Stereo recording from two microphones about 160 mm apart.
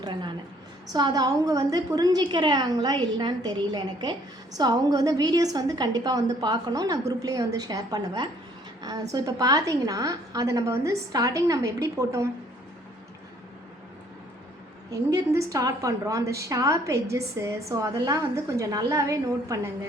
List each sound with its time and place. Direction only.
0.0 s a woman's voice: 30° right (ahead or behind)
14.8 s a woman's voice: 20° right (ahead or behind)